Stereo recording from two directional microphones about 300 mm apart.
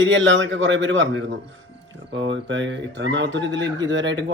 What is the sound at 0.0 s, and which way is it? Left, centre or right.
A man's voice, right.